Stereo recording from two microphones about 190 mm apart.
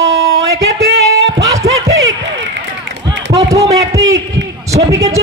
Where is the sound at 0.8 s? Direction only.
60° right (ahead or behind).